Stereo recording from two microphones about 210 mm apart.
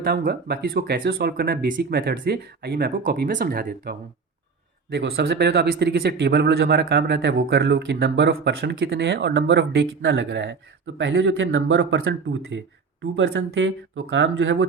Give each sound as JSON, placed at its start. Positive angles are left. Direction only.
{"t": 0.0, "sound": "speech", "side_deg": -45}